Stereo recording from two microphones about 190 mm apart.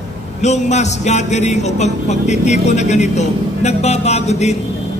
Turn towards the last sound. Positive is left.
turn(degrees=35)  # may be behind; listen again after turning